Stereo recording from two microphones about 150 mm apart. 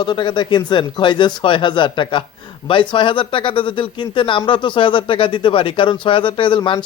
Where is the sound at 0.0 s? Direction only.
30° left (ahead or behind).